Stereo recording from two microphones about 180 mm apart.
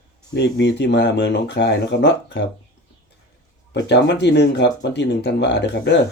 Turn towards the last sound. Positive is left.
turn(degrees=70)  # may be behind; listen again after turning